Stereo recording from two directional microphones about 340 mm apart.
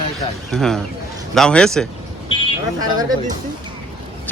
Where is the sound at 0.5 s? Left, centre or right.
Centre.